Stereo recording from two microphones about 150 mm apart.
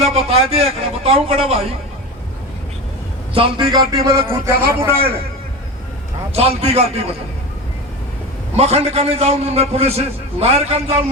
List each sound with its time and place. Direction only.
0.0 s a man's voice: 40° right (ahead or behind)
3.3 s a man's voice: 35° right (ahead or behind)
4.3 s a man's voice: 15° right (ahead or behind)
6.3 s a man's voice: 40° right (ahead or behind)
8.5 s a man's voice: 45° right (ahead or behind)